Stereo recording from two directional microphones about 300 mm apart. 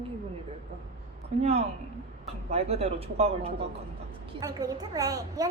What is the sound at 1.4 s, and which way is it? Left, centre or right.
A woman's voice, right.